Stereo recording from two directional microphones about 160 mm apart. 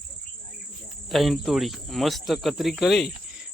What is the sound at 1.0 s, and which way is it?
Speech, centre (ahead or behind).